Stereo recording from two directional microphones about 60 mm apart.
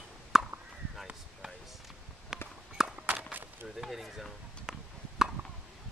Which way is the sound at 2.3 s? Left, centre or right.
Centre.